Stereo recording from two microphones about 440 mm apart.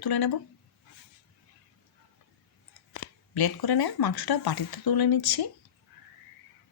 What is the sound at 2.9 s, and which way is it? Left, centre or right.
Speech, left.